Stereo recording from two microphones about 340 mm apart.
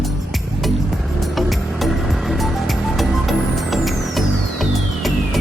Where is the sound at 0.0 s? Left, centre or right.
Centre.